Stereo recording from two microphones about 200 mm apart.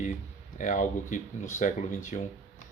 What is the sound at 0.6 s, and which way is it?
Speech, 40° left (ahead or behind).